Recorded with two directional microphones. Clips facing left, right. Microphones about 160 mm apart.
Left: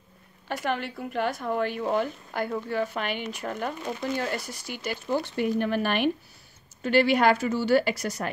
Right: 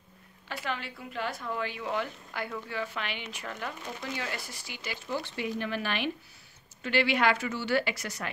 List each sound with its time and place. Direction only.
0.5 s a woman's voice: 55° left (ahead or behind); by 8.3 s 35° left (ahead or behind)